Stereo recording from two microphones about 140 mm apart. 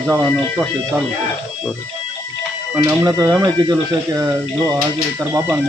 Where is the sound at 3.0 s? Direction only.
25° right (ahead or behind).